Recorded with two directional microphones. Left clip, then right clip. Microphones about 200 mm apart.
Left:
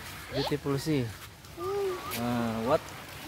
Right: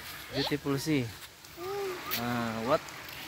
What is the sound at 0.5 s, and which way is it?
Speech, 20° right (ahead or behind).